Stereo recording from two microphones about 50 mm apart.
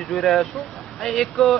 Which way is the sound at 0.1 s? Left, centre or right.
Centre.